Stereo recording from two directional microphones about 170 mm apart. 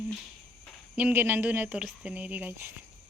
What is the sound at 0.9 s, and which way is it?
Speech, 10° right (ahead or behind).